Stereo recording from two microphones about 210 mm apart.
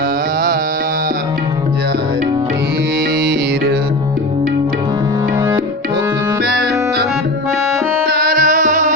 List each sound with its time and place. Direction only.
6.4 s music: 50° right (ahead or behind)
8.0 s music: 45° right (ahead or behind)